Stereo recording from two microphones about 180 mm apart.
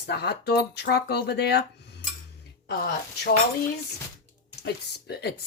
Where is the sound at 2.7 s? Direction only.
60° left (ahead or behind).